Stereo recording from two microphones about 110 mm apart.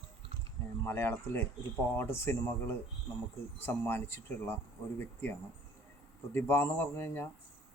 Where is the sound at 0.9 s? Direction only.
20° left (ahead or behind).